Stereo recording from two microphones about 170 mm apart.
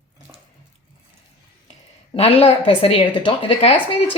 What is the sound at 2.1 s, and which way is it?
A woman's voice, 35° left (ahead or behind).